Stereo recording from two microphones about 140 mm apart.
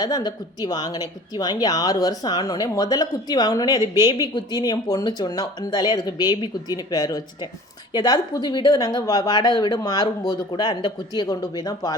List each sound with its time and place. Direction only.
0.0 s speech: 30° left (ahead or behind)